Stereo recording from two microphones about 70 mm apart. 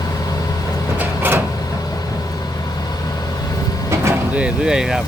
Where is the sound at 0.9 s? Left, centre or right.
Right.